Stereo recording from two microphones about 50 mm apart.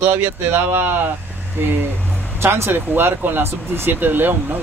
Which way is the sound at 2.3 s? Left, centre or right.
Right.